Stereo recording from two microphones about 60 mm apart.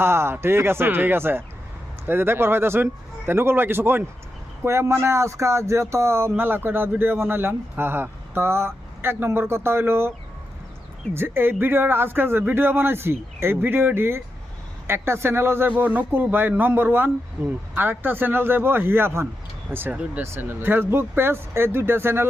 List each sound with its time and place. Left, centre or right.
0.0 s speech: right
11.1 s speech: right
15.7 s speech: right